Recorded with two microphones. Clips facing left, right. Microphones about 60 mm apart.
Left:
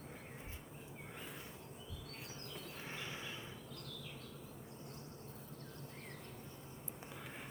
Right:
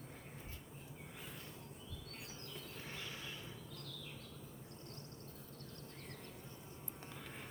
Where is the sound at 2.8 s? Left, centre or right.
Left.